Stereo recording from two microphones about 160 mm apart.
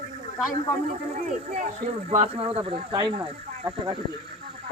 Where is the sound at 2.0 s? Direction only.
40° right (ahead or behind).